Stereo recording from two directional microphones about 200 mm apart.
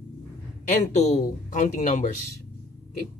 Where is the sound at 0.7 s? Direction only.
35° left (ahead or behind).